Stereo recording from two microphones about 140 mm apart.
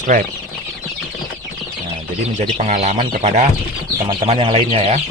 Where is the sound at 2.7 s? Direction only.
50° right (ahead or behind).